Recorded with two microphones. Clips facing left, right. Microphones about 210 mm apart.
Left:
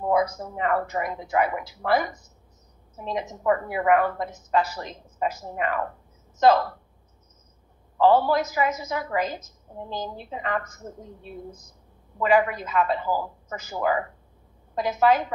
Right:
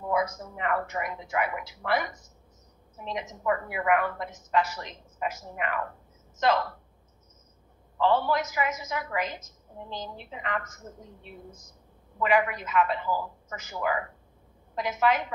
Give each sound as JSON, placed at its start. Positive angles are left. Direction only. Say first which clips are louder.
{"t": 0.0, "sound": "a woman's voice", "louder": "left 5 dB", "side_deg": 40}
{"t": 8.0, "sound": "a woman's voice", "louder": "left 5 dB", "side_deg": 40}
{"t": 12.2, "sound": "a woman's voice", "louder": "left 4 dB", "side_deg": 35}